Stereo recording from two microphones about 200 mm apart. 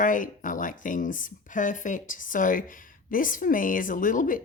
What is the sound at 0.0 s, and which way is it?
Speech, 40° left (ahead or behind).